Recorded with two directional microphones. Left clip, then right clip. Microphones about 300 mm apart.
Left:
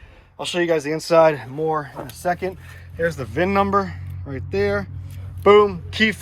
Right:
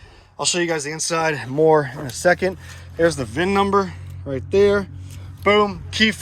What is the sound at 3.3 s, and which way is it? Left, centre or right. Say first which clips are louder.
Speech: right 1 dB; centre.